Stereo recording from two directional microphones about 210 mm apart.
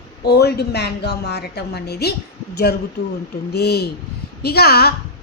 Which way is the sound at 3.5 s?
50° left (ahead or behind).